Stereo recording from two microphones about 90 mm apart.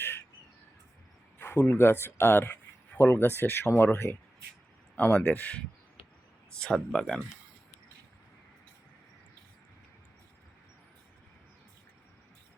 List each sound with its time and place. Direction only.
0.0 s crow: 25° left (ahead or behind)
1.4 s a sound: 20° left (ahead or behind)
1.8 s speech: 25° left (ahead or behind)
4.9 s speech: 15° left (ahead or behind)